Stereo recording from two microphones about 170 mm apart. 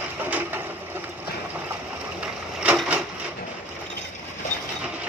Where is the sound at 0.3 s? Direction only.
10° right (ahead or behind).